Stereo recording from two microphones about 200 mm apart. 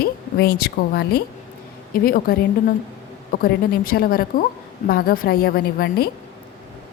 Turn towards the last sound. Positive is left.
turn(degrees=50)  # may be behind; listen again after turning